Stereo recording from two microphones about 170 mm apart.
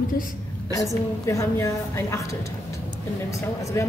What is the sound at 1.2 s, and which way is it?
Speech, 15° left (ahead or behind).